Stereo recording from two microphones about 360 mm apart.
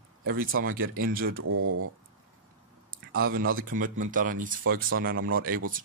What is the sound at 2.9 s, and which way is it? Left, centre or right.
Speech, right.